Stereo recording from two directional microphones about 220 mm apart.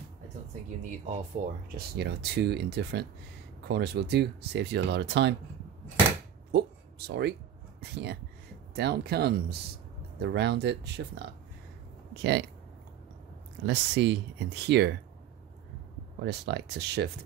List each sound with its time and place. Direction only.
1.4 s speech: 35° right (ahead or behind)
1.8 s speech: 50° right (ahead or behind)
7.1 s speech: 50° right (ahead or behind)
13.7 s speech: 50° right (ahead or behind)
16.2 s speech: 50° right (ahead or behind)